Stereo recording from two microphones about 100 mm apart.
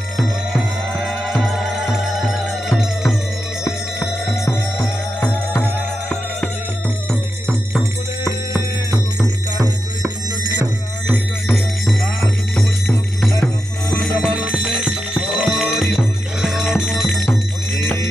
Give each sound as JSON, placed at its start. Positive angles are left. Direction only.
{"t": 2.2, "sound": "music", "side_deg": -5}
{"t": 3.6, "sound": "music", "side_deg": 30}
{"t": 8.3, "sound": "music", "side_deg": -20}
{"t": 11.5, "sound": "music", "side_deg": 0}